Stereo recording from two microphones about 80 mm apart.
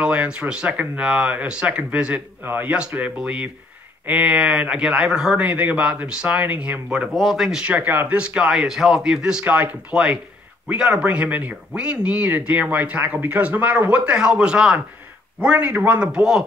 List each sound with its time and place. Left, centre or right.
0.0 s a man's voice: centre
3.2 s speech: centre
7.2 s speech: centre
7.6 s speech: right